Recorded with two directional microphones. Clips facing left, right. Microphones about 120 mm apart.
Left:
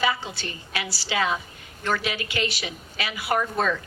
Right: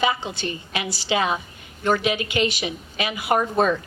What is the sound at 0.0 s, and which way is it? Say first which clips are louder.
A woman's voice: right 3 dB; 20° right (ahead or behind).